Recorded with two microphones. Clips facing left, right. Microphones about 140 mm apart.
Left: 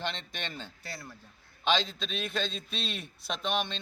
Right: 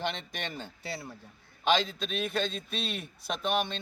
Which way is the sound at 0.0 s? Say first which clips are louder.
Right 2 dB; 10° right (ahead or behind).